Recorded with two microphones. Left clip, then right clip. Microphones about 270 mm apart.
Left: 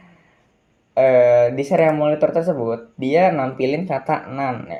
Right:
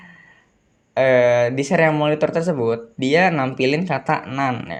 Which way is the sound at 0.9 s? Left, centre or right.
Right.